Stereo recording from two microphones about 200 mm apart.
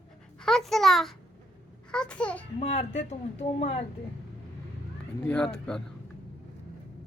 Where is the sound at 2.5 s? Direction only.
30° left (ahead or behind).